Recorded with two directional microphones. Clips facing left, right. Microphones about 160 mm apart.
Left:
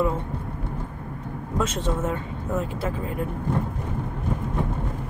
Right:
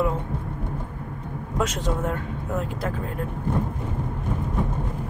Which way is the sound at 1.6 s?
Centre (ahead or behind).